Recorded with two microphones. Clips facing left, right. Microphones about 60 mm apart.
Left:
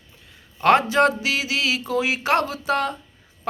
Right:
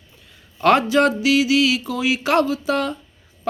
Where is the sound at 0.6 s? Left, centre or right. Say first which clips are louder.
Right 1 dB; left.